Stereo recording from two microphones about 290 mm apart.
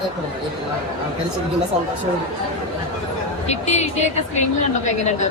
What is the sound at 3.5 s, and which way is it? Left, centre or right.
Speech, left.